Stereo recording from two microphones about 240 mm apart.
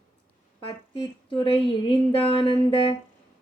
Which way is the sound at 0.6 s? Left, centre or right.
Centre.